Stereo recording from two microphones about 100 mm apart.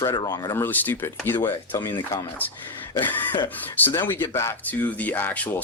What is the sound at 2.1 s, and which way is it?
Speech, 25° left (ahead or behind).